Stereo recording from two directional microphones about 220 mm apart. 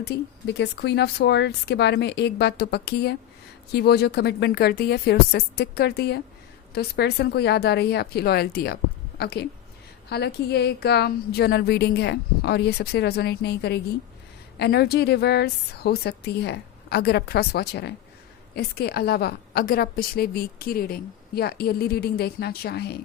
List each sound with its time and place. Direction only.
0.0 s a woman's voice: 50° left (ahead or behind)